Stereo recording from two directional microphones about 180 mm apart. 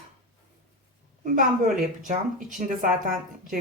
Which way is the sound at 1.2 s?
50° right (ahead or behind).